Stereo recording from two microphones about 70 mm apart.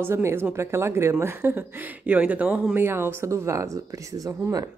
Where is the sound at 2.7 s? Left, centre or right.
Right.